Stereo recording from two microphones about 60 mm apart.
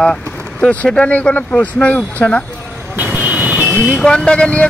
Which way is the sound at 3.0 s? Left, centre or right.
Right.